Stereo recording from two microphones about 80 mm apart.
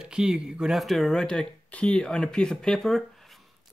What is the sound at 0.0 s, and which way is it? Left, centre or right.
Speech, centre.